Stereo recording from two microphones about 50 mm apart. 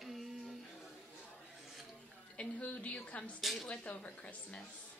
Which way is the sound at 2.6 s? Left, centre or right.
Left.